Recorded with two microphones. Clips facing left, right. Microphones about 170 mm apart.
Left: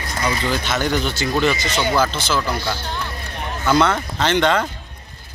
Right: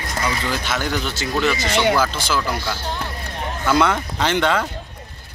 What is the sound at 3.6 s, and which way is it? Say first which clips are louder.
Speech: left 1 dB; 10° right (ahead or behind).